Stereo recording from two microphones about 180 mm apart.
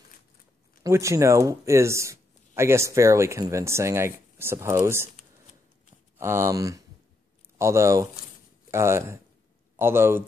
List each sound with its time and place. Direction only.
0.8 s speech: 15° right (ahead or behind)
6.1 s speech: 15° right (ahead or behind)